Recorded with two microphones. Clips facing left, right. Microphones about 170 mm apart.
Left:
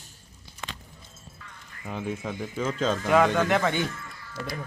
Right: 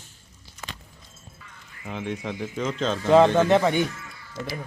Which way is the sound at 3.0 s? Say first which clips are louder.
Right 6 dB; 25° right (ahead or behind).